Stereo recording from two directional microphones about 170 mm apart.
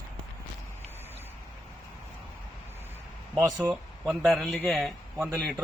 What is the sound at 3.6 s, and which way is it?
Speech, 10° right (ahead or behind).